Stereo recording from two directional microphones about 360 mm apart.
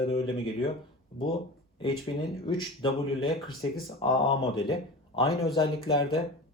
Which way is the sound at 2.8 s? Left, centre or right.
Centre.